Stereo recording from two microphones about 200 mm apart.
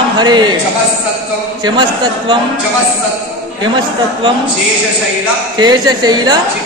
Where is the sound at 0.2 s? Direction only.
20° right (ahead or behind).